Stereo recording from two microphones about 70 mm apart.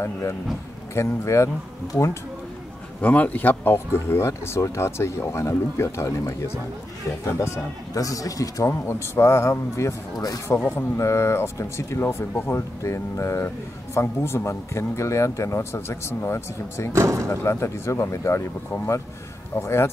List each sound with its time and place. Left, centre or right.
0.9 s speech: left
3.0 s speech: left
4.3 s speech: left
10.1 s speech: left
11.0 s speech: left
16.9 s speech: right
17.4 s speech: left
19.6 s speech: left